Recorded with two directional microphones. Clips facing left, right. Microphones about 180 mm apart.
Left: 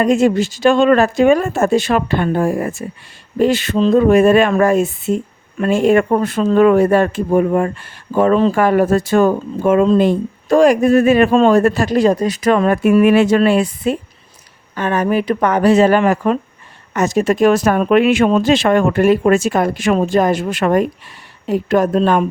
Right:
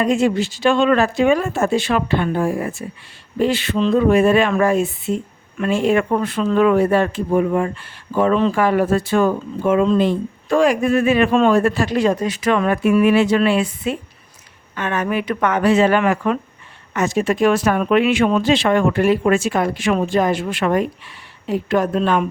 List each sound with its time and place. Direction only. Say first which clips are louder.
0.0 s speech: left 4 dB; 45° left (ahead or behind)